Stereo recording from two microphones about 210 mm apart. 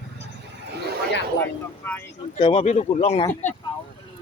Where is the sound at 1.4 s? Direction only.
10° left (ahead or behind).